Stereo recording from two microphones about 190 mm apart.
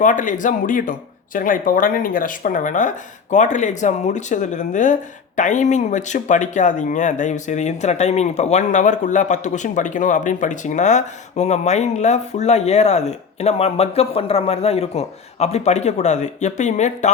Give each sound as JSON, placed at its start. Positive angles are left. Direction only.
{"t": 0.0, "sound": "speech", "side_deg": 40}